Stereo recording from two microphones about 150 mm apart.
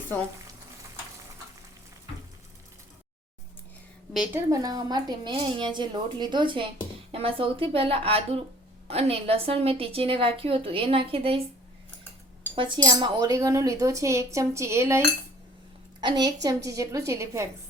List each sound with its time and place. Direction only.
4.4 s a woman's voice: 25° right (ahead or behind)
12.5 s speech: 35° right (ahead or behind); by 15.0 s 15° right (ahead or behind)
16.0 s speech: 30° right (ahead or behind)